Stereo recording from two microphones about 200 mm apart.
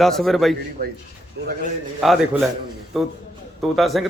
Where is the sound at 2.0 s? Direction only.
Centre (ahead or behind).